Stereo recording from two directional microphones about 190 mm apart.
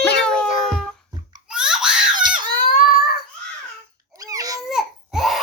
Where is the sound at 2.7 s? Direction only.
50° left (ahead or behind).